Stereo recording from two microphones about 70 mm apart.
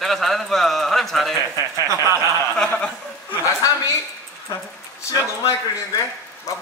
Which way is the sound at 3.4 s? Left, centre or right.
Left.